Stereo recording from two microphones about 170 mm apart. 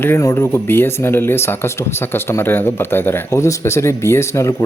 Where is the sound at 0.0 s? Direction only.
15° left (ahead or behind).